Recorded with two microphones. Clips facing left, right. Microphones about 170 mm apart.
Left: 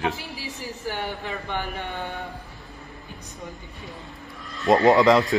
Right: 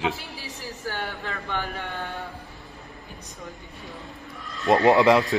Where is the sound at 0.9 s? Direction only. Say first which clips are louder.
Left 2 dB; 15° left (ahead or behind).